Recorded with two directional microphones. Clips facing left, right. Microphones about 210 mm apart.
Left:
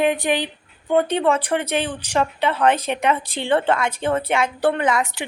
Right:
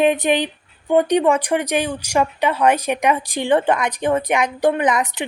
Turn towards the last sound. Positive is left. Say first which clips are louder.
# right 2 dB
turn(degrees=-20)  # may be behind; listen again after turning